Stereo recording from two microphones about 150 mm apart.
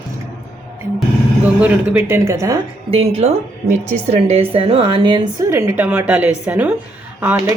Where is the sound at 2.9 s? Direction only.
45° right (ahead or behind).